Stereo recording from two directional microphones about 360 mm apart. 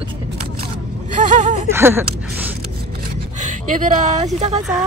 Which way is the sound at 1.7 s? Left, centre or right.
Centre.